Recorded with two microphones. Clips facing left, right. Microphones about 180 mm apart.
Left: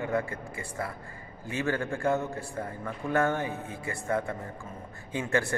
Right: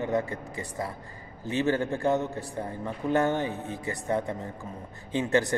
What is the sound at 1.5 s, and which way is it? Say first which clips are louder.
A man's voice: right 4 dB; 20° right (ahead or behind).